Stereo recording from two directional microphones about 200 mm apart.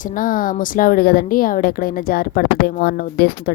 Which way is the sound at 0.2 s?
45° left (ahead or behind).